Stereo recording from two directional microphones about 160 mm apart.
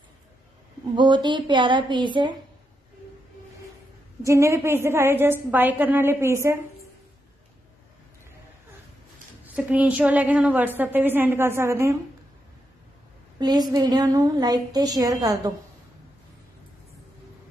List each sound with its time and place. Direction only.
0.9 s a woman's voice: 30° right (ahead or behind)
4.2 s a woman's voice: 20° right (ahead or behind)
9.6 s a woman's voice: 10° right (ahead or behind)
13.4 s a woman's voice: 25° right (ahead or behind)